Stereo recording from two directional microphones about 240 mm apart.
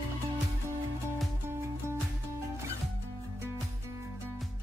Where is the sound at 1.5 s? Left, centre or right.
Centre.